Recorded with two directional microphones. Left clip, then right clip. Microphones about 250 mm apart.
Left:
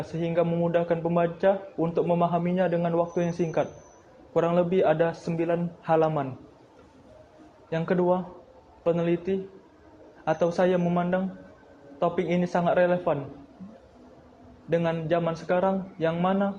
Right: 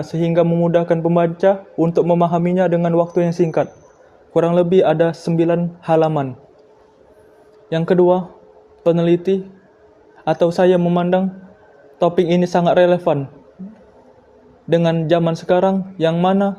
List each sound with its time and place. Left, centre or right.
0.1 s speech: right
7.7 s speech: right
14.7 s speech: right